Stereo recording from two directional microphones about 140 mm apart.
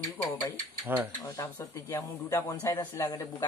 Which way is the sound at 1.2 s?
20° left (ahead or behind).